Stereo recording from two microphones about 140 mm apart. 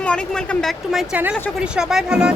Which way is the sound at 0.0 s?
5° left (ahead or behind).